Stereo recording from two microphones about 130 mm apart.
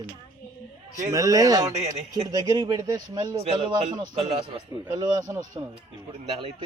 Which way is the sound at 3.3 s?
45° right (ahead or behind).